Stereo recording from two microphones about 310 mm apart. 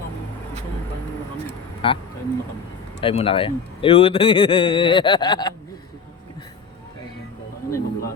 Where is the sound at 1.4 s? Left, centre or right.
Centre.